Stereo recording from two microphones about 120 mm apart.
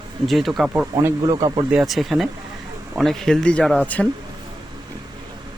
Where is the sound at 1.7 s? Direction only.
Centre (ahead or behind).